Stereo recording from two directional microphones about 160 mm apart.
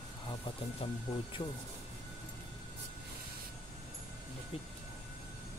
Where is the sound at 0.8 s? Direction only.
35° left (ahead or behind).